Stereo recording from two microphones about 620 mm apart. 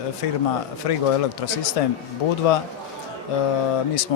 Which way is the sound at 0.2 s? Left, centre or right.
Left.